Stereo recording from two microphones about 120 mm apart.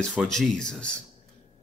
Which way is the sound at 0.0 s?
5° left (ahead or behind).